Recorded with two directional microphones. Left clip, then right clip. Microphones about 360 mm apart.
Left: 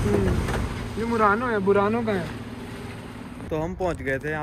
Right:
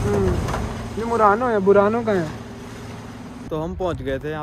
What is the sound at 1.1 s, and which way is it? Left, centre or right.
Speech, centre.